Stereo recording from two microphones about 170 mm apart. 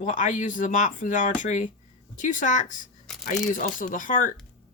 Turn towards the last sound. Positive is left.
turn(degrees=50)  # may be behind; listen again after turning